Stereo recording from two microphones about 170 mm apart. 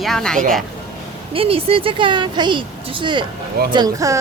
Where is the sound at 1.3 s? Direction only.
35° right (ahead or behind).